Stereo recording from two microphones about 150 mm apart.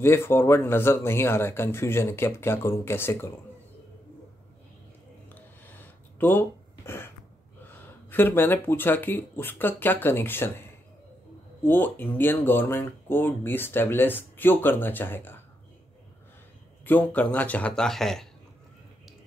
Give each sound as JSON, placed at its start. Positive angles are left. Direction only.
{"t": 0.0, "sound": "speech", "side_deg": 15}
{"t": 5.3, "sound": "a sound", "side_deg": 10}
{"t": 7.6, "sound": "speech", "side_deg": 15}
{"t": 16.8, "sound": "speech", "side_deg": 10}